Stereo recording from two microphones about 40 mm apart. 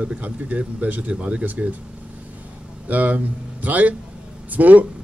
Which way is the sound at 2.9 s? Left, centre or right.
Right.